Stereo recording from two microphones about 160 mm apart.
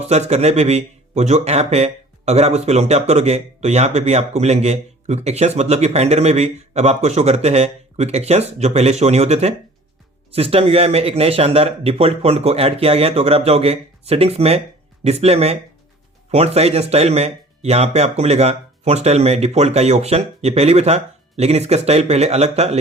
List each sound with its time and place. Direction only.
0.1 s a man's voice: 45° right (ahead or behind)